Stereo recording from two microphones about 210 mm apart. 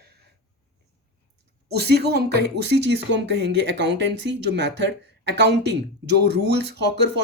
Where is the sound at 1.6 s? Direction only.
50° right (ahead or behind).